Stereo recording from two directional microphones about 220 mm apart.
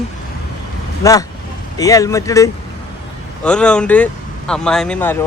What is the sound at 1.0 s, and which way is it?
Speech, 15° left (ahead or behind).